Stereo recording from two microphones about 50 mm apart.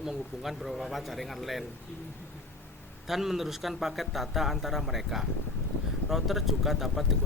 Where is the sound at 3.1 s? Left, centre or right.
Centre.